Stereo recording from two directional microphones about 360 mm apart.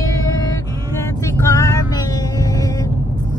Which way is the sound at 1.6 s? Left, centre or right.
Centre.